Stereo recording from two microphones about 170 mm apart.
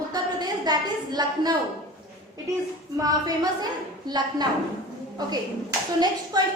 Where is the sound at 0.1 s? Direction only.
25° right (ahead or behind).